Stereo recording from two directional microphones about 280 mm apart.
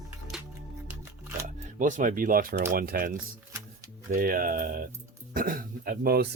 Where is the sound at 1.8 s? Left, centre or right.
Right.